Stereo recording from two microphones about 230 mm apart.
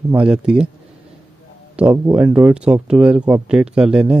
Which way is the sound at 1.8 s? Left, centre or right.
Centre.